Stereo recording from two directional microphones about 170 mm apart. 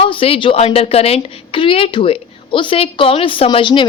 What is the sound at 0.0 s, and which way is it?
A woman's voice, 35° left (ahead or behind).